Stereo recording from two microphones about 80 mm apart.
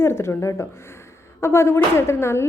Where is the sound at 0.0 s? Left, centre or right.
Left.